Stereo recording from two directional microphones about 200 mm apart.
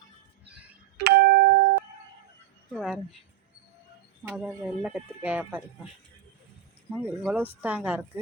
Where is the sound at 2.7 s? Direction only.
Centre (ahead or behind).